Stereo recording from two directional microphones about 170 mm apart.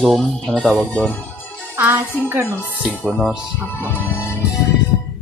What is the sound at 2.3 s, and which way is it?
Speech, 15° right (ahead or behind).